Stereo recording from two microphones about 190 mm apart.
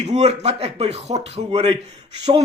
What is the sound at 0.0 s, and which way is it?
A man's voice, 35° right (ahead or behind).